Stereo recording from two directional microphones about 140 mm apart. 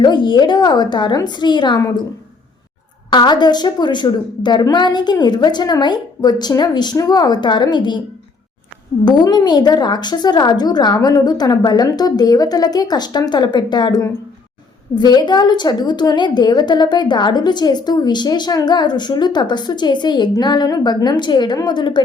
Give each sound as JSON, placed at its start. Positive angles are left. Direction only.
{"t": 0.0, "sound": "a woman's voice", "side_deg": 35}
{"t": 3.1, "sound": "a woman's voice", "side_deg": 30}
{"t": 9.0, "sound": "a woman's voice", "side_deg": 30}